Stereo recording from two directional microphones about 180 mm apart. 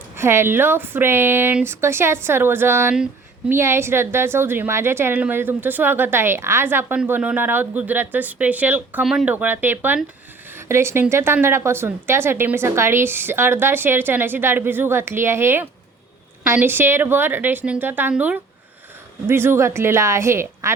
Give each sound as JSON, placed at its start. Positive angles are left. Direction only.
{"t": 0.2, "sound": "a woman's voice", "side_deg": -15}